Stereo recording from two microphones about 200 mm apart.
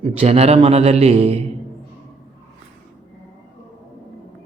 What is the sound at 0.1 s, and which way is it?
A man's voice, 30° right (ahead or behind).